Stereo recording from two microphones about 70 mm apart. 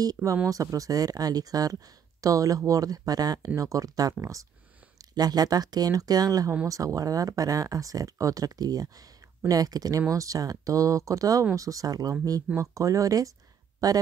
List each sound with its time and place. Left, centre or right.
0.0 s speech: right
5.1 s speech: right
10.0 s speech: right